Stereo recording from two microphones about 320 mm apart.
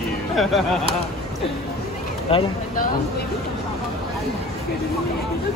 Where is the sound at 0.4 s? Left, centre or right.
Centre.